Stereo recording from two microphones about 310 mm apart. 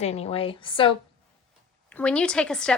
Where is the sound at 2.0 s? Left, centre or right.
Centre.